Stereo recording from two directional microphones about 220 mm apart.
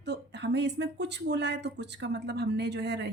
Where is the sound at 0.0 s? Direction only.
50° right (ahead or behind).